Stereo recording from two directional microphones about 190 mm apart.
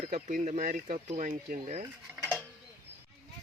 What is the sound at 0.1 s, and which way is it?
Speech, 40° right (ahead or behind).